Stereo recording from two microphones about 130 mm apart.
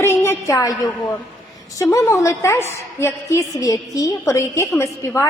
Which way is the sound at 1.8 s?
25° left (ahead or behind).